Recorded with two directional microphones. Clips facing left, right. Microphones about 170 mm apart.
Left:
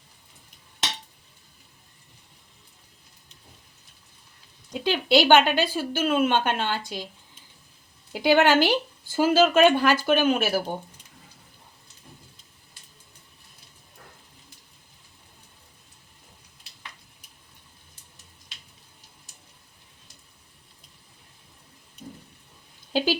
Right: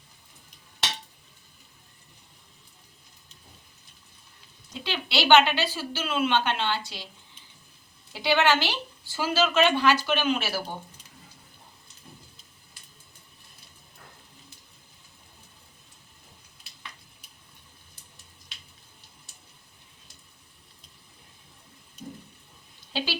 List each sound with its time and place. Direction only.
4.8 s speech: 45° left (ahead or behind)
8.1 s speech: 50° left (ahead or behind)
22.9 s a sound: 45° left (ahead or behind)